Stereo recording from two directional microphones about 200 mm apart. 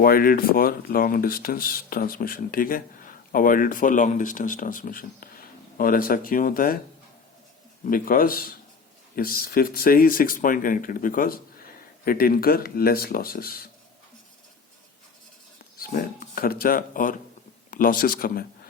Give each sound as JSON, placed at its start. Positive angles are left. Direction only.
{"t": 0.0, "sound": "speech", "side_deg": 45}
{"t": 7.9, "sound": "speech", "side_deg": 45}
{"t": 15.8, "sound": "speech", "side_deg": 50}